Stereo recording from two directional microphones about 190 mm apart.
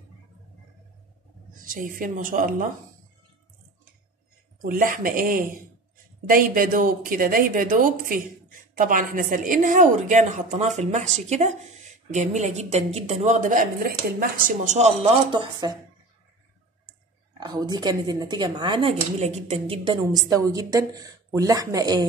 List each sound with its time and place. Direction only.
1.6 s speech: 45° right (ahead or behind)
4.6 s a woman's voice: 45° right (ahead or behind)
15.6 s speech: 20° right (ahead or behind)
17.4 s speech: 20° right (ahead or behind)